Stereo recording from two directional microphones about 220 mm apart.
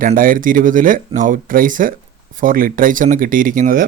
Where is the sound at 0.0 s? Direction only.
40° right (ahead or behind).